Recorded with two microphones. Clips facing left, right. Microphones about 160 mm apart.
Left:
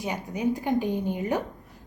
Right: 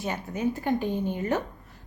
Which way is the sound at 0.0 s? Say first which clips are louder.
Left 1 dB; 15° left (ahead or behind).